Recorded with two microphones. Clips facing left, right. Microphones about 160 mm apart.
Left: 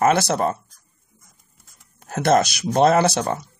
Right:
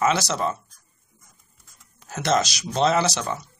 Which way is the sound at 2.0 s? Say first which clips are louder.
Left 5 dB; 55° left (ahead or behind).